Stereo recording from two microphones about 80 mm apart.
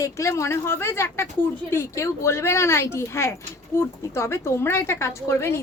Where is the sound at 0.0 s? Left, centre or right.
Left.